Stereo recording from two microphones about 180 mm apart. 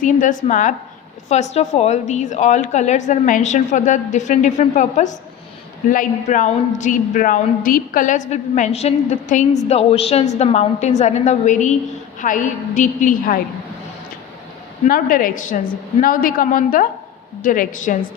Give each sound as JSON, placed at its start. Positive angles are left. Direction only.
{"t": 0.0, "sound": "a man's voice", "side_deg": 45}
{"t": 14.8, "sound": "a man's voice", "side_deg": 50}